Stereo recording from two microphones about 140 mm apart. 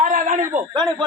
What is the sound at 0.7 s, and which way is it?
Speech, 30° right (ahead or behind).